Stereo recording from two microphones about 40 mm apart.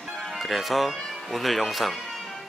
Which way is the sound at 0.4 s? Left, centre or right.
Centre.